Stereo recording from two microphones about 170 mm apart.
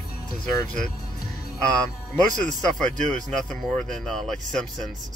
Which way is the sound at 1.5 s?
5° left (ahead or behind).